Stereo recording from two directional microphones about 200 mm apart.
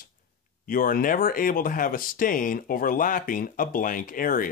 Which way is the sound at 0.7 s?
45° left (ahead or behind).